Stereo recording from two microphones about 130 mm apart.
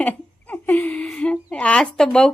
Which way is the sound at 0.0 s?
10° left (ahead or behind).